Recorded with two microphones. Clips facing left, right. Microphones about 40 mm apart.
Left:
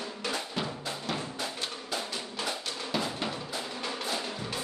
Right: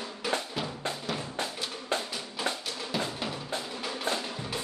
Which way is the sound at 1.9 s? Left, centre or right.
Right.